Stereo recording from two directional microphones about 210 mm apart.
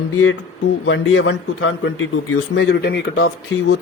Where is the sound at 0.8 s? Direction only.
60° left (ahead or behind).